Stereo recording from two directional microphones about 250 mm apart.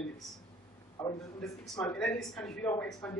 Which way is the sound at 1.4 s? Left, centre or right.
Centre.